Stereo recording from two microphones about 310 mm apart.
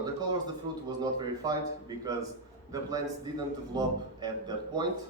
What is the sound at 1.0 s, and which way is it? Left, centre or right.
A man's voice, centre.